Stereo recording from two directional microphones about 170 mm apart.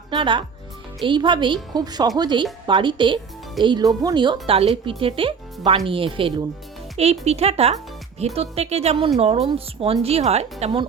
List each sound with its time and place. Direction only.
0.1 s speech: 30° right (ahead or behind)